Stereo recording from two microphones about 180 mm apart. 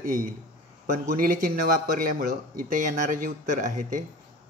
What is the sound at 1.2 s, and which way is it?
Speech, 50° right (ahead or behind).